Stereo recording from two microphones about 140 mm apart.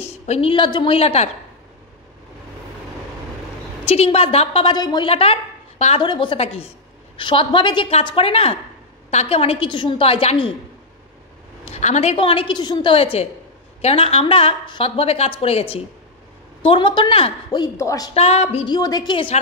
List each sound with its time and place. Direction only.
0.3 s a woman's voice: 40° left (ahead or behind)
3.8 s a woman's voice: 45° left (ahead or behind)
4.7 s a man's voice: 30° left (ahead or behind)
5.0 s a woman's voice: 40° left (ahead or behind)
5.9 s a woman's voice: 35° left (ahead or behind)
11.6 s a woman's voice: 55° left (ahead or behind); by 17.3 s 35° left (ahead or behind)
17.5 s a man's voice: 25° left (ahead or behind)
18.1 s a woman's voice: 50° left (ahead or behind)
18.7 s a woman's voice: 30° left (ahead or behind)